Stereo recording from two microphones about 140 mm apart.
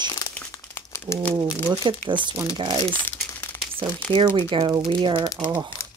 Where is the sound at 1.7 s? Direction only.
35° right (ahead or behind).